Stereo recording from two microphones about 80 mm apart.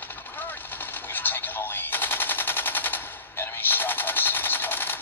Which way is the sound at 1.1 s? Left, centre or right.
Left.